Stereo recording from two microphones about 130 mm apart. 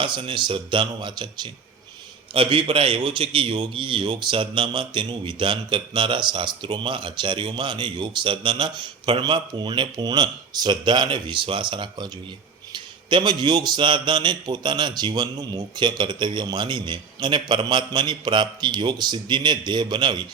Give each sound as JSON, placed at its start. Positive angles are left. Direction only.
{"t": 0.0, "sound": "a man's voice", "side_deg": -40}